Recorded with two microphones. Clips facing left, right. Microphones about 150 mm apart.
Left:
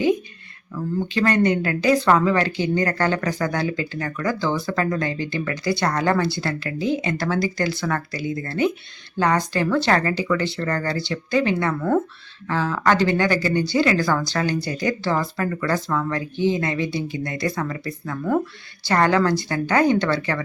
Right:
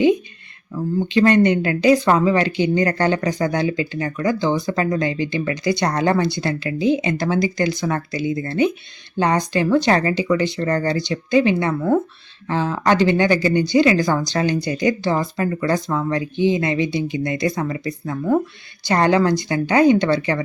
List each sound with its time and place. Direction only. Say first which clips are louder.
0.9 s a woman's voice: right 5 dB; 20° right (ahead or behind)